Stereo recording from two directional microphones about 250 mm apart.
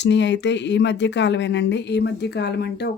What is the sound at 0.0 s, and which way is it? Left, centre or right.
Speech, left.